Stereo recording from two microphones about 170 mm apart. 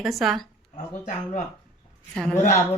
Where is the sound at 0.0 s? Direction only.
Centre (ahead or behind).